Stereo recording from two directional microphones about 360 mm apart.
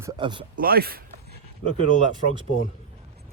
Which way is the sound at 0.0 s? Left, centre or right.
Centre.